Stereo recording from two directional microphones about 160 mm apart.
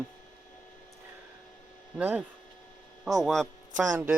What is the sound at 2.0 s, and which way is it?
Speech, 10° right (ahead or behind).